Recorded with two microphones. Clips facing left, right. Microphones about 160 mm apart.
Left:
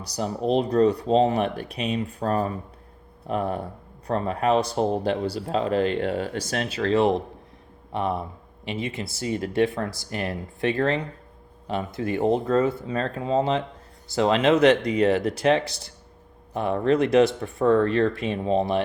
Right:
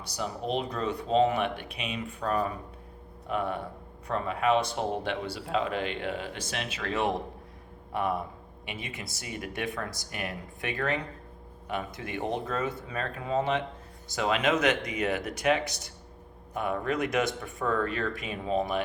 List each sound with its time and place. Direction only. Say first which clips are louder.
0.0 s speech: left 7 dB; 35° left (ahead or behind)